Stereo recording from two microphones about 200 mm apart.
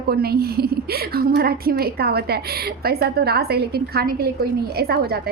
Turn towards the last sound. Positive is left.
turn(degrees=-50)  # may be behind; listen again after turning